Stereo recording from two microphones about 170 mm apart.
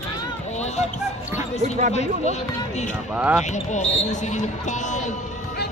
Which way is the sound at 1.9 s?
40° left (ahead or behind).